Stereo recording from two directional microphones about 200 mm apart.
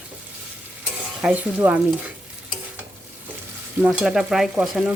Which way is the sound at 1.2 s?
5° right (ahead or behind).